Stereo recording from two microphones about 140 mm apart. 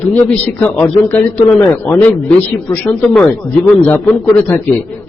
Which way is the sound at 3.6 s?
10° left (ahead or behind).